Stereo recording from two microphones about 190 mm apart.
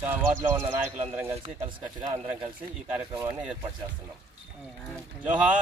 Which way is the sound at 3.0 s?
15° right (ahead or behind).